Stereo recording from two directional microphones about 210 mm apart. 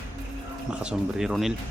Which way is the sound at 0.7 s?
5° right (ahead or behind).